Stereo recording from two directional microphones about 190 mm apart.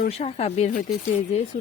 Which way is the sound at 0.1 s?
35° left (ahead or behind).